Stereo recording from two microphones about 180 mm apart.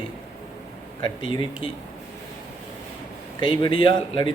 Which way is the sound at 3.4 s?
25° left (ahead or behind).